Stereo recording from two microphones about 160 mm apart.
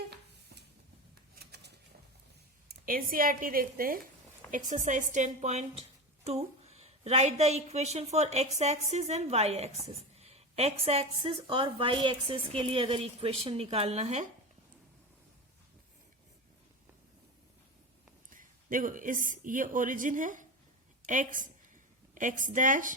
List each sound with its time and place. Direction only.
1.4 s a sound: 90° right
2.8 s a woman's voice: 65° right (ahead or behind)
4.5 s a woman's voice: 50° right (ahead or behind)
18.3 s a woman's voice: 55° right (ahead or behind)